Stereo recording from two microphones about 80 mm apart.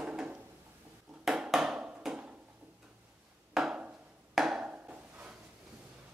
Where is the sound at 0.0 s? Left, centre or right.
Centre.